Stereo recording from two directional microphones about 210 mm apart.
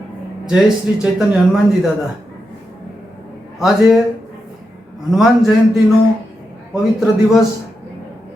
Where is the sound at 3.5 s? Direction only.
Centre (ahead or behind).